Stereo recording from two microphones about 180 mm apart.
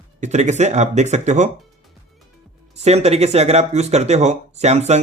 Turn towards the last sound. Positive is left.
turn(degrees=-40)  # may be behind; listen again after turning